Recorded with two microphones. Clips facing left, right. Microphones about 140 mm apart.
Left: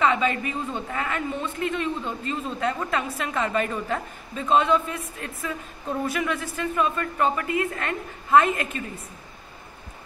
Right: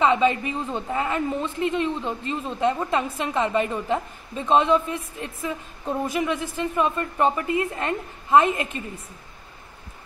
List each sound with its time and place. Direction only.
0.0 s a woman's voice: 30° right (ahead or behind)